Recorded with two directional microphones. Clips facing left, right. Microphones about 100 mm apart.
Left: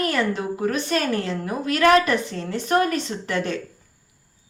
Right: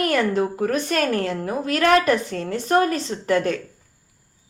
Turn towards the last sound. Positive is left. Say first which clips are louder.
# right 5 dB
turn(degrees=-40)  # may be behind; listen again after turning